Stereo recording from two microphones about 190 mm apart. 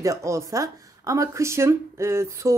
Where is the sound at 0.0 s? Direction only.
15° right (ahead or behind).